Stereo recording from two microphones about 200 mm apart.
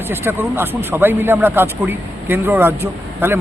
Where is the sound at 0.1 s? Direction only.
10° right (ahead or behind).